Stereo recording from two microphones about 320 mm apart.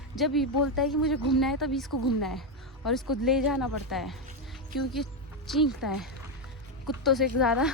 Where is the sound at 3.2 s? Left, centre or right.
Centre.